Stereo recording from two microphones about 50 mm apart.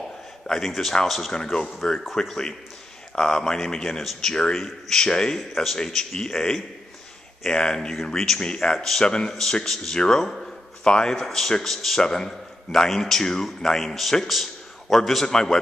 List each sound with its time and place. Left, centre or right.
0.5 s a man's voice: centre
9.0 s a man's voice: centre
10.4 s a sound: centre
11.2 s a man's voice: centre